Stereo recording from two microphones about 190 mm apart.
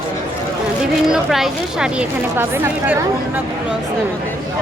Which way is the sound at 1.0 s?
Centre (ahead or behind).